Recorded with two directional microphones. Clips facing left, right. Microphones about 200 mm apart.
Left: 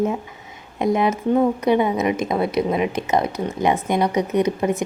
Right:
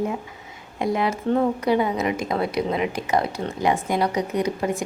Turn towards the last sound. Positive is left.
turn(degrees=20)  # may be behind; listen again after turning